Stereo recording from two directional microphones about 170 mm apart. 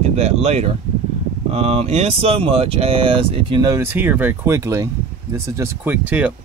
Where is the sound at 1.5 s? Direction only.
40° right (ahead or behind); by 6.3 s 10° right (ahead or behind).